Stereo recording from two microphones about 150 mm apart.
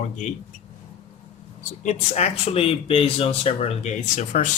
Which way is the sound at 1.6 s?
50° left (ahead or behind).